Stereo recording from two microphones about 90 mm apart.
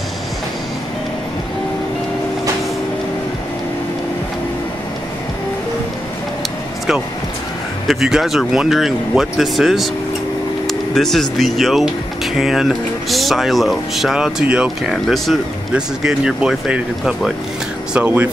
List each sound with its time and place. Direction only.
7.9 s speech: 5° right (ahead or behind)
17.9 s speech: 20° right (ahead or behind)